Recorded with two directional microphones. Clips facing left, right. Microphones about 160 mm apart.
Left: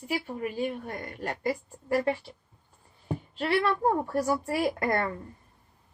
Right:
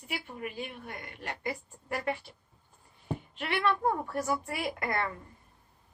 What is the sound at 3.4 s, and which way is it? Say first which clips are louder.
A woman's voice: left 4 dB; 35° left (ahead or behind).